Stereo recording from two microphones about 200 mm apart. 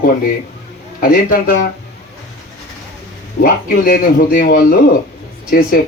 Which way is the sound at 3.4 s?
45° left (ahead or behind).